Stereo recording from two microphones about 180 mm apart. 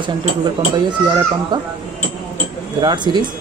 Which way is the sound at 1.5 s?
25° right (ahead or behind).